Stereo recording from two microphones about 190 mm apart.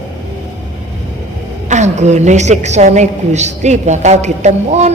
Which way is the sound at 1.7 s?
35° right (ahead or behind).